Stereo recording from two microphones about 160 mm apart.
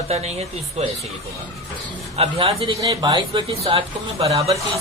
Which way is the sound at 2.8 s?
25° right (ahead or behind).